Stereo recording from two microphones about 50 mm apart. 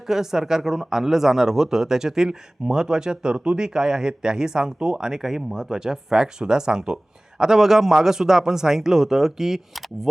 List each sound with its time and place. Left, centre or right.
0.1 s speech: centre